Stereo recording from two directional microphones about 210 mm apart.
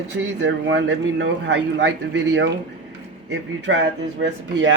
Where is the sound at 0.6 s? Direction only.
60° right (ahead or behind).